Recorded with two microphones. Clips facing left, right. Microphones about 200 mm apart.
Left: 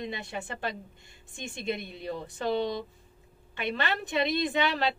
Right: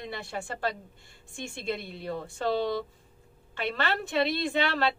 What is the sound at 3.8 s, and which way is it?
A woman's voice, 20° left (ahead or behind).